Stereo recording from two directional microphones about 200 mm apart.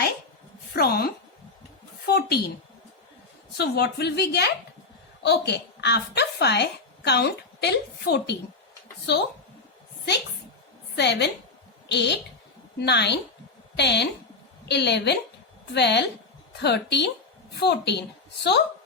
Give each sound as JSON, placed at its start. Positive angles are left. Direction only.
{"t": 0.8, "sound": "a woman's voice", "side_deg": 50}
{"t": 3.6, "sound": "a woman's voice", "side_deg": 55}
{"t": 10.9, "sound": "a woman's voice", "side_deg": 60}